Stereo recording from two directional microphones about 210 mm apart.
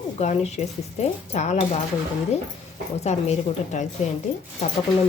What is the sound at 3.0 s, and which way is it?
Speech, 30° left (ahead or behind).